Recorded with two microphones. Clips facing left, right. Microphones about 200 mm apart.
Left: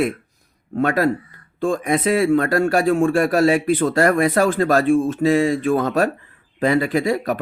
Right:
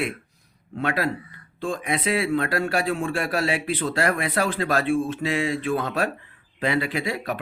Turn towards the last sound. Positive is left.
turn(degrees=45)  # may be behind; listen again after turning